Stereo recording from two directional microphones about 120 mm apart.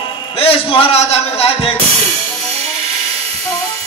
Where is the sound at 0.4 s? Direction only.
50° left (ahead or behind).